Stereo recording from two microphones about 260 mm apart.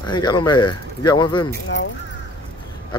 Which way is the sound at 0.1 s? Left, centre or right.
Centre.